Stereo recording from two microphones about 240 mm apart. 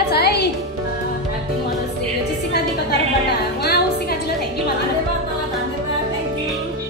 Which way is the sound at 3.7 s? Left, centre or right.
Left.